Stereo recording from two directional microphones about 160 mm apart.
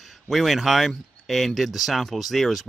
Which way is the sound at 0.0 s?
Centre (ahead or behind).